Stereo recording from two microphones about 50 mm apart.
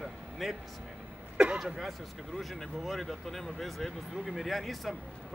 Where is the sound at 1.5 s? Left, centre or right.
Centre.